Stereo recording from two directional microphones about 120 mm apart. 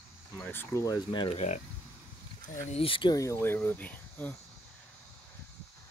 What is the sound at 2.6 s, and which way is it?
Speech, 55° left (ahead or behind).